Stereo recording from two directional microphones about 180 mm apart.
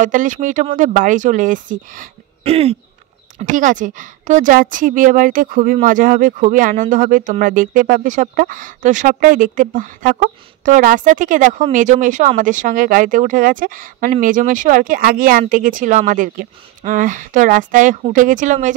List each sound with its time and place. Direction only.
0.0 s speech: 45° right (ahead or behind)
2.4 s throat clearing: 35° right (ahead or behind)
3.3 s speech: 45° right (ahead or behind)